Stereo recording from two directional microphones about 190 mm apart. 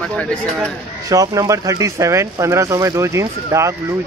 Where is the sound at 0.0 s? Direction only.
5° left (ahead or behind).